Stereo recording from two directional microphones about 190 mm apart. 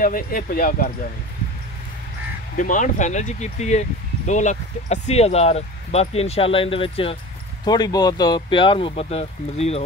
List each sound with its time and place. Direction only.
0.0 s speech: 50° left (ahead or behind)
2.5 s speech: 40° left (ahead or behind)